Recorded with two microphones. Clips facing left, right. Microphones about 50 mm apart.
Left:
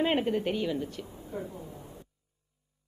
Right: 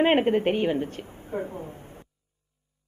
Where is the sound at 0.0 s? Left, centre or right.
Right.